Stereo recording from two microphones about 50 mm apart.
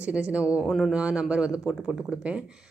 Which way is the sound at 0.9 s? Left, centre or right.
Right.